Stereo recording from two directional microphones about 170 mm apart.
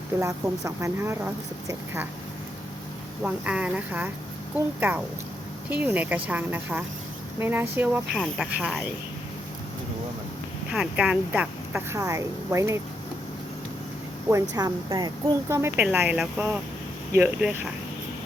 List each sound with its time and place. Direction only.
0.2 s a woman's voice: 15° right (ahead or behind)
3.2 s a woman's voice: 5° right (ahead or behind)
10.7 s a woman's voice: 5° right (ahead or behind)
14.5 s a woman's voice: 25° right (ahead or behind)